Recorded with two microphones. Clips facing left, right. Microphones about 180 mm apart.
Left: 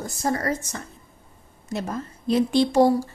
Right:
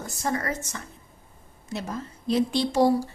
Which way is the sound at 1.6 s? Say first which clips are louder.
Left 3 dB; 50° left (ahead or behind).